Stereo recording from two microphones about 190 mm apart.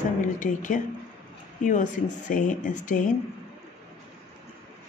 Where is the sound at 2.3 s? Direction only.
40° left (ahead or behind).